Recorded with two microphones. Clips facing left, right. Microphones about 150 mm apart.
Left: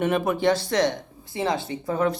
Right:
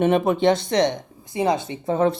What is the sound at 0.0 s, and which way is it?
Speech, 25° right (ahead or behind).